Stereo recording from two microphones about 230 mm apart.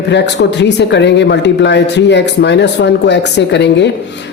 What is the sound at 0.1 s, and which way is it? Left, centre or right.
Speech, left.